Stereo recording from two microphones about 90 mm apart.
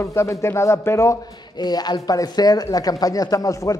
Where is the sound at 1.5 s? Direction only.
50° left (ahead or behind).